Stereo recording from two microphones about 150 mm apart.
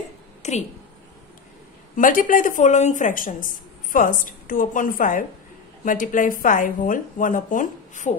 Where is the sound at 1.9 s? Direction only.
65° left (ahead or behind).